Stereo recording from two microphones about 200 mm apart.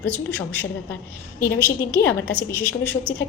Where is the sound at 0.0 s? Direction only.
10° left (ahead or behind).